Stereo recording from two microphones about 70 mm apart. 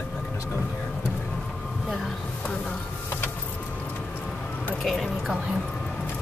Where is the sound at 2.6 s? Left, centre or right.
Left.